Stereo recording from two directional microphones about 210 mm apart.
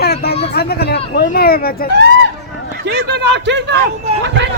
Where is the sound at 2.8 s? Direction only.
55° right (ahead or behind).